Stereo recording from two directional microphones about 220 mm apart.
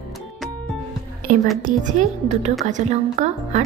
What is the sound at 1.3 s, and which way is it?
A woman's voice, 40° right (ahead or behind).